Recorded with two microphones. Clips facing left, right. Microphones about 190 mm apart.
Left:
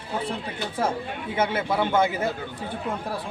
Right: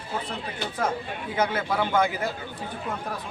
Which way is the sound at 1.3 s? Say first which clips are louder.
Left 1 dB; 25° left (ahead or behind).